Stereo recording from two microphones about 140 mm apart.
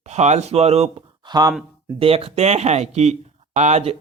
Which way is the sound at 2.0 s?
45° right (ahead or behind).